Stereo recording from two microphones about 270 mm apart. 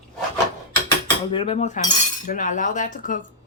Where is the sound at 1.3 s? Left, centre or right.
Left.